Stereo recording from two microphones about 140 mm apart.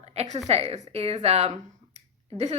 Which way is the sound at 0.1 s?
50° right (ahead or behind).